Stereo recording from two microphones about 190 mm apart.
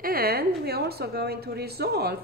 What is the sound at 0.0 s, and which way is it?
A woman's voice, 55° right (ahead or behind).